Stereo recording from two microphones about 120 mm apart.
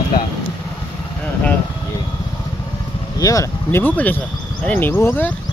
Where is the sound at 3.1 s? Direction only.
30° left (ahead or behind).